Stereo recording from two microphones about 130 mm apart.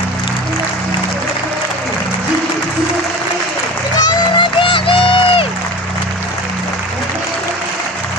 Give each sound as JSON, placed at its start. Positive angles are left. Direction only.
{"t": 4.0, "sound": "crowd", "side_deg": 35}